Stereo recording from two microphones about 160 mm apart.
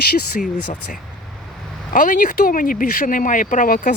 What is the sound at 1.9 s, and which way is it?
Speech, 55° left (ahead or behind).